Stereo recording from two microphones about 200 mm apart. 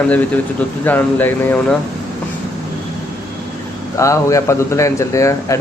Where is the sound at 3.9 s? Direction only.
15° left (ahead or behind).